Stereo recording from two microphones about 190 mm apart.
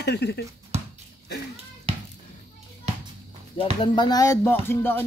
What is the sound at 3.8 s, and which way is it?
Speech, 20° left (ahead or behind).